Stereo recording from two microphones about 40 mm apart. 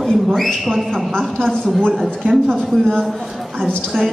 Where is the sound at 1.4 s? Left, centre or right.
Centre.